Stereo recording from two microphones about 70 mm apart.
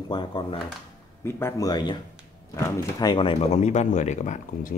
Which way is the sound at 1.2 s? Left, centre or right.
Left.